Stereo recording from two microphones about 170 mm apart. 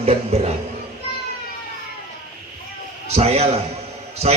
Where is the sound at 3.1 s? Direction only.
40° right (ahead or behind).